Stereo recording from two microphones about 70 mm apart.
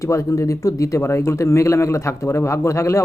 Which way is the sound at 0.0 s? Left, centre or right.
Left.